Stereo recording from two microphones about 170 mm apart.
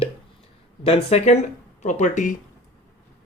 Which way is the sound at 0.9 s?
40° left (ahead or behind).